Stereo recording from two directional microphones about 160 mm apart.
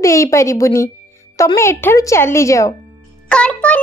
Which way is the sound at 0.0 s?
20° left (ahead or behind).